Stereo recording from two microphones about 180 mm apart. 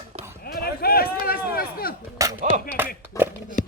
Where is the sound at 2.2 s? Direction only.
15° right (ahead or behind).